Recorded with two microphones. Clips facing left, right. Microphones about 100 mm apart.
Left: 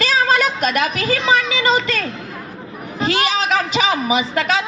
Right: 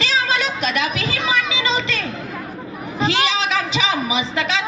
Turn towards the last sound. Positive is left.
turn(degrees=50)  # may be behind; listen again after turning